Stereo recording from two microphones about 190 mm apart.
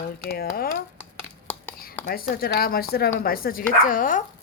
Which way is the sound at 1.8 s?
50° left (ahead or behind).